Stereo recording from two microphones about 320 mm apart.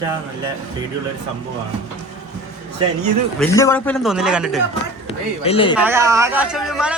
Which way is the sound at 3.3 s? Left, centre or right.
Centre.